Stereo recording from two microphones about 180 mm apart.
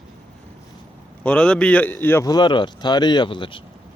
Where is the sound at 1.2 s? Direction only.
5° left (ahead or behind); by 3.6 s 25° left (ahead or behind).